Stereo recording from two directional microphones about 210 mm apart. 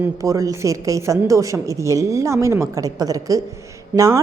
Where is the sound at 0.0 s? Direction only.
15° right (ahead or behind).